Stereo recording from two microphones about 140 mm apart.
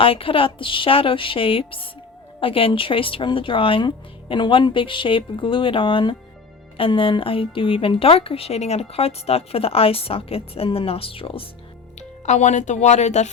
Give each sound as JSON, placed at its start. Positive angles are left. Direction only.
{"t": 0.0, "sound": "speech", "side_deg": 40}
{"t": 11.9, "sound": "speech", "side_deg": 55}